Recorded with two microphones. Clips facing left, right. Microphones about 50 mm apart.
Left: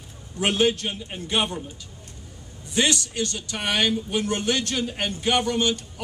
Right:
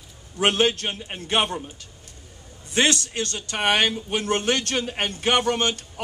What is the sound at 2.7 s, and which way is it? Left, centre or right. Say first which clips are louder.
Speech: right 2 dB; right.